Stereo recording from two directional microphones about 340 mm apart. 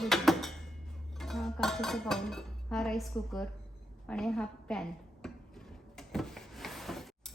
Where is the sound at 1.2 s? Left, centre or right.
Centre.